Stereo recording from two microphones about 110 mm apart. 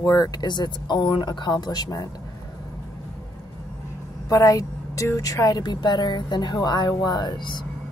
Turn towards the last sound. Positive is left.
turn(degrees=45)  # may be behind; listen again after turning